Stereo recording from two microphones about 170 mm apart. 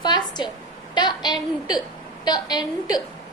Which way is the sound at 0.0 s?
25° left (ahead or behind).